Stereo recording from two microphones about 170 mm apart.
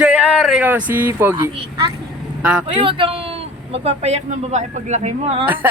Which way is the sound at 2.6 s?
30° right (ahead or behind).